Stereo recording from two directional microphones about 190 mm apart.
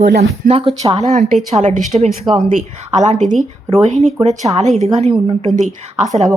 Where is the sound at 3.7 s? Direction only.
35° right (ahead or behind).